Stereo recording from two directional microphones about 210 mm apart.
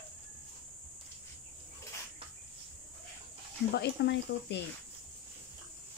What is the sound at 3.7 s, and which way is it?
Speech, 55° left (ahead or behind).